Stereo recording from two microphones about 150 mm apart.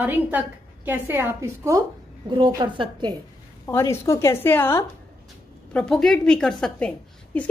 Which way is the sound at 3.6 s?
15° left (ahead or behind).